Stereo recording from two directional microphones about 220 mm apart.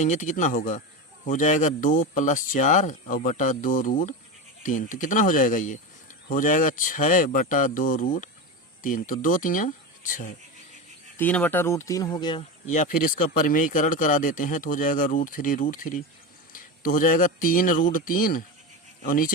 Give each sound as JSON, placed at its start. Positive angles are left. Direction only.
{"t": 0.0, "sound": "speech", "side_deg": 35}
{"t": 11.2, "sound": "speech", "side_deg": 10}
{"t": 12.6, "sound": "speech", "side_deg": 35}